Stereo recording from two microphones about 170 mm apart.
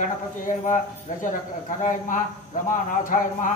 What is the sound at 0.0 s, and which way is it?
Speech, 50° left (ahead or behind).